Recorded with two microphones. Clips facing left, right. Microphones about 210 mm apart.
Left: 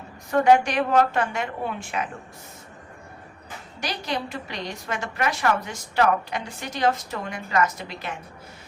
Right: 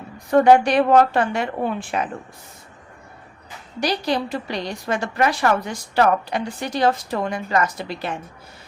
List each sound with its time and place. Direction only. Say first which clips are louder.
0.3 s a woman's voice: right 4 dB; 35° right (ahead or behind)
3.8 s a woman's voice: right 7 dB; 35° right (ahead or behind)